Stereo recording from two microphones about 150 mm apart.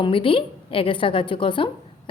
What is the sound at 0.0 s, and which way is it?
A woman's voice, 35° left (ahead or behind).